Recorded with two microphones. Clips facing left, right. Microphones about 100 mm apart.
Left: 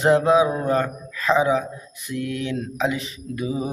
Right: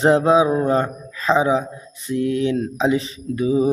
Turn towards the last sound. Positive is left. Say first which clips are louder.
# right 8 dB
turn(degrees=-30)  # may be behind; listen again after turning